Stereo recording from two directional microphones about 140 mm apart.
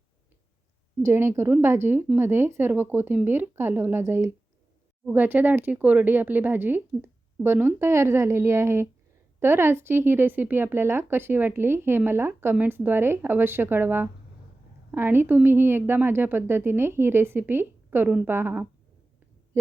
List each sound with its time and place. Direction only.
1.0 s speech: 20° right (ahead or behind)